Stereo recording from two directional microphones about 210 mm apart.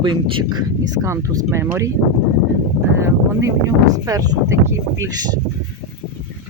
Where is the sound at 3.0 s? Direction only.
15° right (ahead or behind).